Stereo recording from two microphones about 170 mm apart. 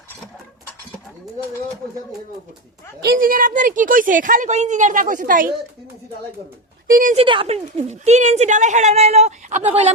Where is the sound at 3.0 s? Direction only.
60° right (ahead or behind).